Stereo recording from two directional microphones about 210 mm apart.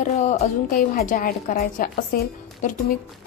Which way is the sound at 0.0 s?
35° left (ahead or behind).